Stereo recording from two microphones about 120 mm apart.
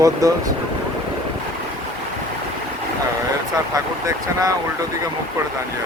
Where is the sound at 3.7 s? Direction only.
30° right (ahead or behind).